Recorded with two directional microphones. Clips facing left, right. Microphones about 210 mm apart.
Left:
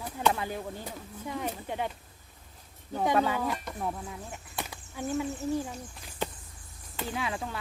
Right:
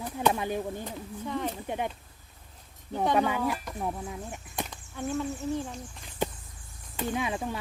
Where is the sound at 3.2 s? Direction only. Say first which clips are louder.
Right 1 dB; 15° right (ahead or behind).